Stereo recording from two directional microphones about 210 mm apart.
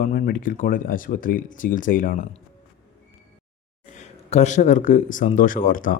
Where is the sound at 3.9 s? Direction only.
30° left (ahead or behind).